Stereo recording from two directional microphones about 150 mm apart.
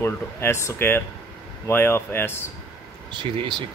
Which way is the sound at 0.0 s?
15° left (ahead or behind).